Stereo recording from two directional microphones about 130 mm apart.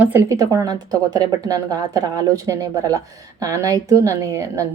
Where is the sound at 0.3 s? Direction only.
30° right (ahead or behind).